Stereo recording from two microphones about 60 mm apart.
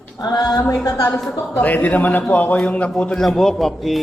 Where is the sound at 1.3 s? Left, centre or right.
Left.